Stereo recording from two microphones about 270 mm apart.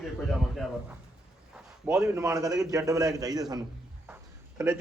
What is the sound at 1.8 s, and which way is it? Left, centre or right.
A man's voice, centre.